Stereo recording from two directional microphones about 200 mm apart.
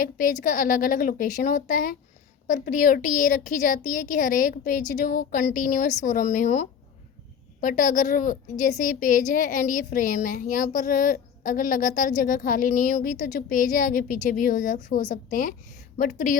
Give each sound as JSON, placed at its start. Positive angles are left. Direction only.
{"t": 0.0, "sound": "a woman's voice", "side_deg": 40}